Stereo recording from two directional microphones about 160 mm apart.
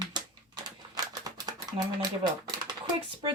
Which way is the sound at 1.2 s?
25° right (ahead or behind).